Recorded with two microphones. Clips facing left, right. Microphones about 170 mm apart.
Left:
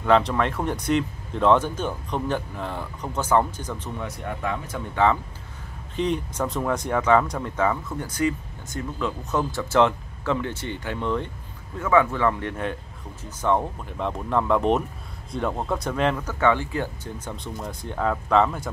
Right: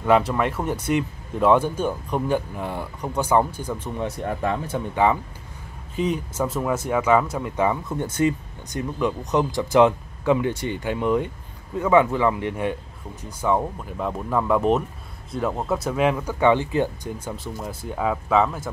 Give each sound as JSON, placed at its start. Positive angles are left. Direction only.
{"t": 0.0, "sound": "speech", "side_deg": -10}
{"t": 4.0, "sound": "speech", "side_deg": -35}
{"t": 4.9, "sound": "speech", "side_deg": -15}